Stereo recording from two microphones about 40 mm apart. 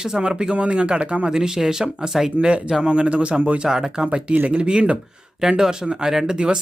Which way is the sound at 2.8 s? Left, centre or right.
Right.